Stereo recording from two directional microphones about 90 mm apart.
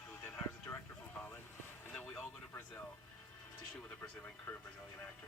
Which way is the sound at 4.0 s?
20° left (ahead or behind).